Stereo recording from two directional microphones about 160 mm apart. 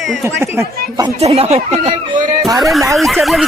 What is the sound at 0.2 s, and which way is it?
Speech, 15° right (ahead or behind).